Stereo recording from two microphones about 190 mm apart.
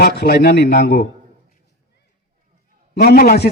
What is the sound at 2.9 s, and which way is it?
Speech, 55° left (ahead or behind).